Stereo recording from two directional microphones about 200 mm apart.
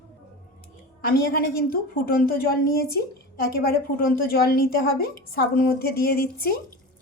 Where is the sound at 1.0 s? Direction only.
50° left (ahead or behind).